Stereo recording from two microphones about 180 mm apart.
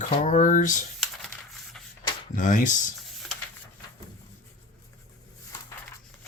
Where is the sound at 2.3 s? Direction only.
45° left (ahead or behind).